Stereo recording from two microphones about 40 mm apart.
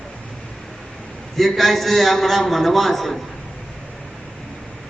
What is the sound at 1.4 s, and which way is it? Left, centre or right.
A man's voice, centre.